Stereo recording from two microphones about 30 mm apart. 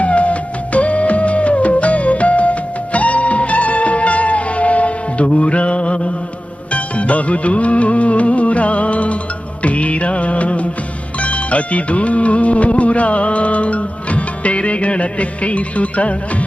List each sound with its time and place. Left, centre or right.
0.0 s music: left
9.6 s music of bollywood: left
11.2 s music: left